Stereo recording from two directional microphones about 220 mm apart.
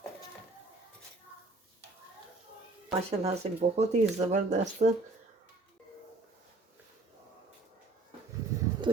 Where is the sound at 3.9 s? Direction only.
30° right (ahead or behind).